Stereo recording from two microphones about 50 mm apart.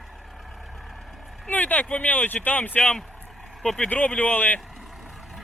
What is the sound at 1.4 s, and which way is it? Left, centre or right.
Speech, left.